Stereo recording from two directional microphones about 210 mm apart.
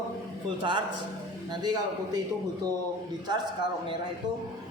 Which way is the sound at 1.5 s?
20° right (ahead or behind).